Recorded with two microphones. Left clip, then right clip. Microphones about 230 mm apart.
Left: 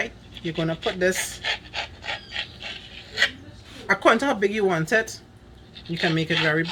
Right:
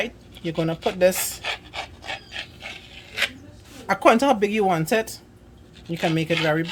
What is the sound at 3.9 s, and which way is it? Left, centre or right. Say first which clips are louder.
Speech: right 2 dB; right.